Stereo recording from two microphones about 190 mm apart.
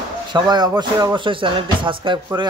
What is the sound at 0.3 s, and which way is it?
Speech, 20° right (ahead or behind).